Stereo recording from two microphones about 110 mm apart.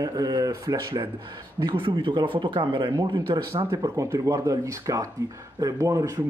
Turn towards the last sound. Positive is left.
turn(degrees=-30)  # may be behind; listen again after turning